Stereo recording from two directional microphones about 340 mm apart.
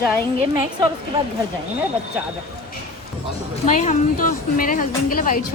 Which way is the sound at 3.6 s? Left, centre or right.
Left.